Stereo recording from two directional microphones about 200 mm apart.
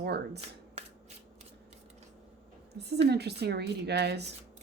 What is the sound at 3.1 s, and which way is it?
Speech, 55° right (ahead or behind).